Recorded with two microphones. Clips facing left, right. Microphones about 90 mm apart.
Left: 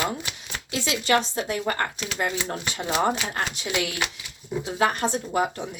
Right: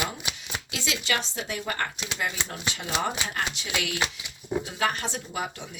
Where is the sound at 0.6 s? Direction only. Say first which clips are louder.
Left 7 dB; 40° left (ahead or behind).